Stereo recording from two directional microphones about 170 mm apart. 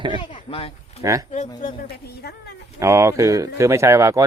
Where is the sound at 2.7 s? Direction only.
15° right (ahead or behind).